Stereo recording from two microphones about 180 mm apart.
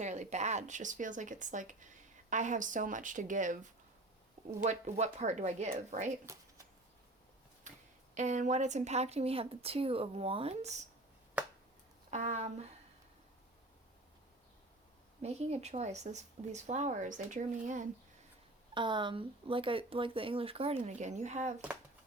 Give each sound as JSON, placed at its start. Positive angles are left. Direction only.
{"t": 0.0, "sound": "speech", "side_deg": -40}
{"t": 6.2, "sound": "a sound", "side_deg": -15}
{"t": 7.7, "sound": "a sound", "side_deg": -45}
{"t": 8.1, "sound": "speech", "side_deg": -40}
{"t": 12.1, "sound": "speech", "side_deg": -40}
{"t": 15.2, "sound": "speech", "side_deg": -35}
{"t": 18.7, "sound": "speech", "side_deg": -25}